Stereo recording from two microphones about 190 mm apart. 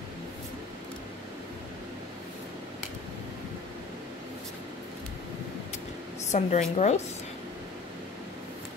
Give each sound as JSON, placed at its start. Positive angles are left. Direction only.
{"t": 6.3, "sound": "a woman's voice", "side_deg": 35}